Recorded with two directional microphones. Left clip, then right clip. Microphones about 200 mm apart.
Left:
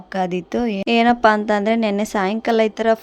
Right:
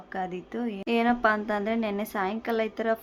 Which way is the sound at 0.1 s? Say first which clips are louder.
Left 11 dB; 40° left (ahead or behind).